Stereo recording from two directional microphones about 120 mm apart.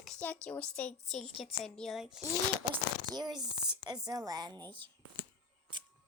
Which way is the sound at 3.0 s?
35° right (ahead or behind).